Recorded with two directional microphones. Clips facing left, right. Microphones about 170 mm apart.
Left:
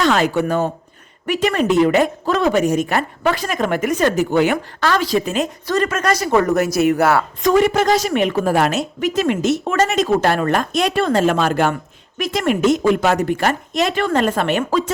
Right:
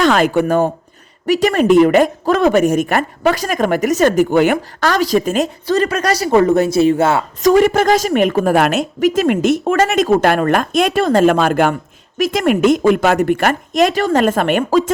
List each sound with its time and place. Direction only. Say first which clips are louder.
0.0 s a woman's voice: right 3 dB; 50° right (ahead or behind)
5.6 s speech: right 2 dB; 30° right (ahead or behind)
7.4 s a woman's voice: right 4 dB; 50° right (ahead or behind)